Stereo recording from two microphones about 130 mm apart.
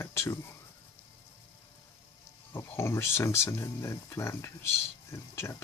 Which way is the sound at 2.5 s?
20° left (ahead or behind).